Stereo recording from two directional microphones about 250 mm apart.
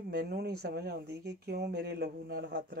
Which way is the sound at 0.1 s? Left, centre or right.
Right.